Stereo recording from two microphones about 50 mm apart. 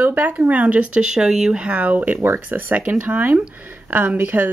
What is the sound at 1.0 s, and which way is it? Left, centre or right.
Speech, centre.